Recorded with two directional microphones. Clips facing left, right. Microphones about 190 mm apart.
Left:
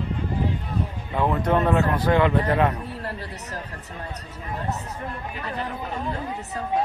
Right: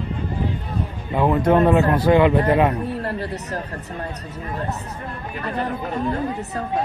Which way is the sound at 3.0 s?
60° right (ahead or behind).